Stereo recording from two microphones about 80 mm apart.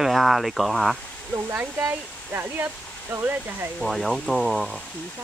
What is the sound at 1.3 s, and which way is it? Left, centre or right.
Speech, right.